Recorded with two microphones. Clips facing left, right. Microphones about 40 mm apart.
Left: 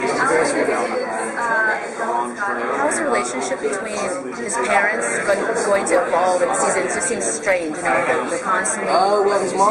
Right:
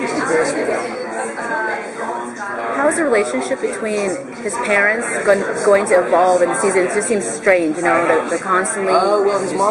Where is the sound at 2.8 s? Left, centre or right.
Centre.